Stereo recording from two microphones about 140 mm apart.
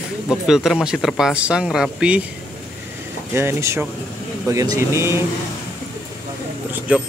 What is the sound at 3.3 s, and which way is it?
Speech, 20° right (ahead or behind).